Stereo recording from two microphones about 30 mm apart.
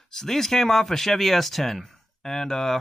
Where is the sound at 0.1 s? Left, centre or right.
Centre.